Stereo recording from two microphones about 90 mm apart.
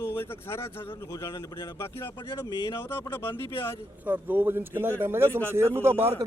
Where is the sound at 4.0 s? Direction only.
20° right (ahead or behind).